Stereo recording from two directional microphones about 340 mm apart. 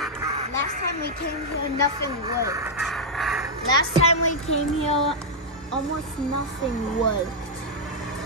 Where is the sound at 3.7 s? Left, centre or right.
Left.